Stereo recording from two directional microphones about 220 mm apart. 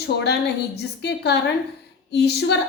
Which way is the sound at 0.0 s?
50° left (ahead or behind).